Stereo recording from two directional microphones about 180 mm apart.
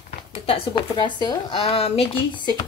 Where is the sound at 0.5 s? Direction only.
25° left (ahead or behind).